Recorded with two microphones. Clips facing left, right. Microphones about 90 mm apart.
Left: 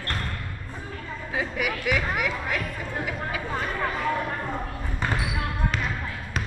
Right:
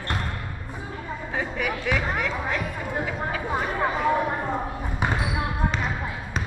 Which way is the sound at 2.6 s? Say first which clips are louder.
Right 3 dB; 15° right (ahead or behind).